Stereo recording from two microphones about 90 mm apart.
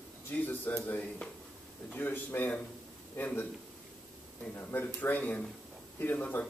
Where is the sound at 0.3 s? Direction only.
20° left (ahead or behind).